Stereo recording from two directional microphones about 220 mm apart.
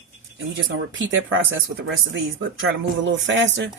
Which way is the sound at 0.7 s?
60° right (ahead or behind).